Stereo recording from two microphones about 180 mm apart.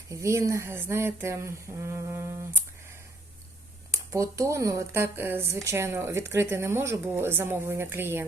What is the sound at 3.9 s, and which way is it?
Speech, 15° right (ahead or behind).